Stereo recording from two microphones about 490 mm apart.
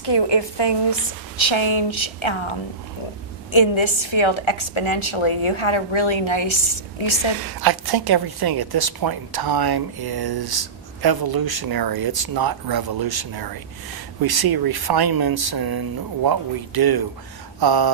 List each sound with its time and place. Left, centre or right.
0.0 s a woman's voice: left
1.4 s a woman's voice: left
3.5 s a woman's voice: left
7.4 s a woman's voice: right